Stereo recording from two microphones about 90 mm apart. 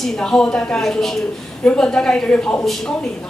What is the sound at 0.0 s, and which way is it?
A woman's voice, 5° left (ahead or behind).